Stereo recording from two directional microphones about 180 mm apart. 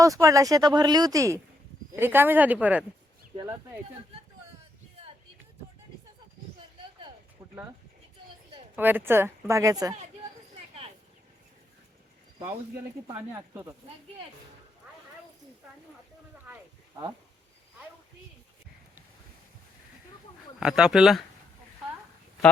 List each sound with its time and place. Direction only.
0.0 s speech: 20° right (ahead or behind)
8.7 s speech: 10° right (ahead or behind)
10.5 s a sound: 35° right (ahead or behind)
13.1 s speech: 15° right (ahead or behind)
20.6 s speech: 5° right (ahead or behind)